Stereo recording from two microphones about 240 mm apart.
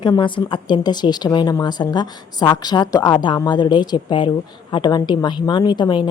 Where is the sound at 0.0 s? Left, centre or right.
Centre.